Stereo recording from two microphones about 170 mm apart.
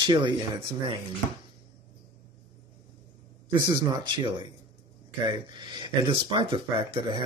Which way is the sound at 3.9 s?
25° right (ahead or behind).